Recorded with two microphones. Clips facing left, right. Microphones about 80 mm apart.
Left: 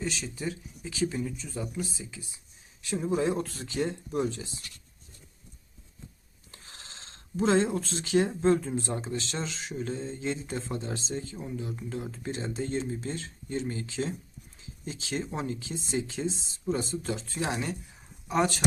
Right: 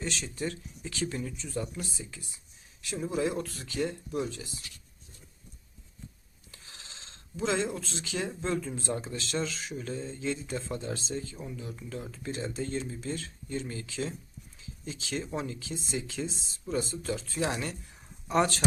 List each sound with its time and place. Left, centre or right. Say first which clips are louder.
0.0 s speech: left 1 dB; centre
3.2 s speech: left 2 dB; left
6.5 s speech: left 2 dB; left
18.3 s speech: even; centre